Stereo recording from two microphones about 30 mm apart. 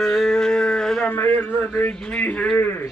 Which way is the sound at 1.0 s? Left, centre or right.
Left.